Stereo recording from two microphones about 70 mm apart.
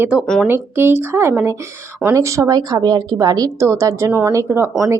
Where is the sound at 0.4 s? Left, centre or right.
Right.